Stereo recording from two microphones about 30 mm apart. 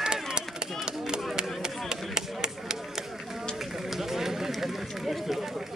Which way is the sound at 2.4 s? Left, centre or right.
Centre.